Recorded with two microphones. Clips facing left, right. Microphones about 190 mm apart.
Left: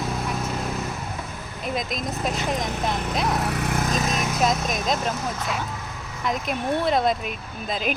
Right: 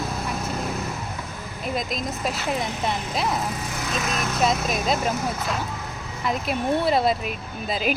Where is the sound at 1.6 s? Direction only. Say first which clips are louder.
Even; centre (ahead or behind).